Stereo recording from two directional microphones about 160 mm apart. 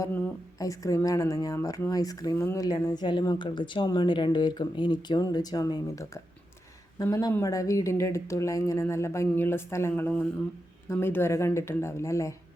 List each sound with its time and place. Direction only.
0.6 s speech: 20° left (ahead or behind)
2.6 s speech: 25° left (ahead or behind)